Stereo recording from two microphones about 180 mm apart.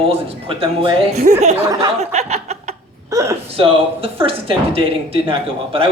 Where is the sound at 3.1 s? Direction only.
15° right (ahead or behind).